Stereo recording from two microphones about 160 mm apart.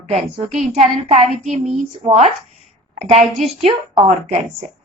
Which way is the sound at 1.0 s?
40° right (ahead or behind).